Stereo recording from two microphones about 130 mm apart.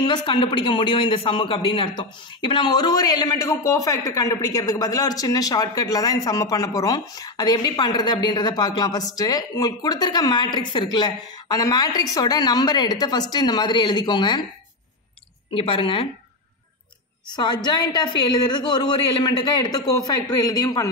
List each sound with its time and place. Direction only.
0.0 s a man's voice: 35° left (ahead or behind)
15.5 s speech: 45° left (ahead or behind)
17.6 s a man's voice: 35° left (ahead or behind)